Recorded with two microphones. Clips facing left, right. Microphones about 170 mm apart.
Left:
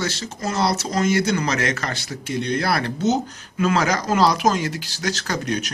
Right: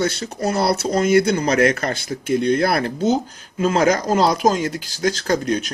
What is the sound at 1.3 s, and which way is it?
Speech, 30° right (ahead or behind).